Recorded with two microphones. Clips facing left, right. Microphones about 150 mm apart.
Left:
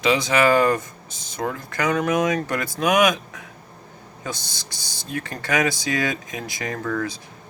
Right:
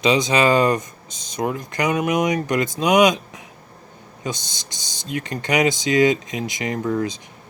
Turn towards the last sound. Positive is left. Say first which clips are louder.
# right 4 dB
turn(degrees=-20)  # may be behind; listen again after turning